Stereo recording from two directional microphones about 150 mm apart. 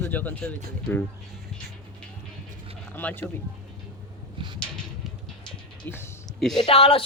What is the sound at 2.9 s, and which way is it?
Speech, 10° left (ahead or behind).